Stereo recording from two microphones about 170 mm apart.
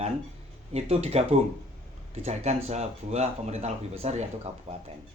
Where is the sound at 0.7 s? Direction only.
40° right (ahead or behind).